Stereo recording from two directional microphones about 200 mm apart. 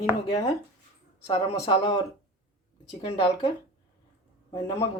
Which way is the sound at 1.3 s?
30° left (ahead or behind).